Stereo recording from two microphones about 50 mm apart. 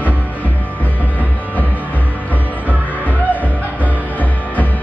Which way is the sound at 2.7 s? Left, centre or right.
Right.